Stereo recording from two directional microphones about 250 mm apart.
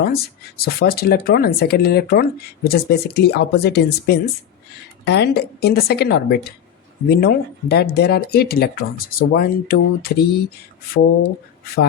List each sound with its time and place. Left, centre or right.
0.0 s speech: left